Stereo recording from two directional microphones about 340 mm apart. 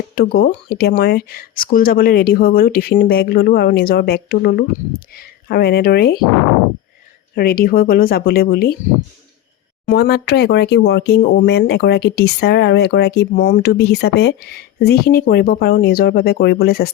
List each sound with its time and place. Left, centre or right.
0.2 s speech: left
7.3 s speech: left
9.8 s speech: left